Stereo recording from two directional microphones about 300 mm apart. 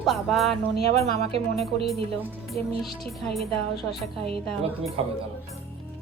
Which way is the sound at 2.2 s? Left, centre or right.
Centre.